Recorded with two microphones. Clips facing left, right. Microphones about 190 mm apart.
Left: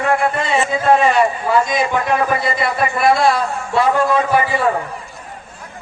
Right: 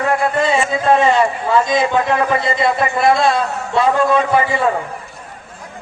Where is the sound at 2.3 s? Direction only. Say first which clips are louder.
Right 2 dB; 25° right (ahead or behind).